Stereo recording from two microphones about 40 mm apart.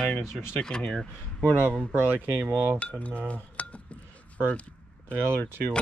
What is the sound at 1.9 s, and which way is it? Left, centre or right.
Speech, right.